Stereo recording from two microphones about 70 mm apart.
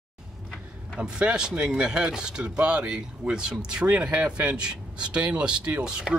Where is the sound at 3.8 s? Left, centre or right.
Right.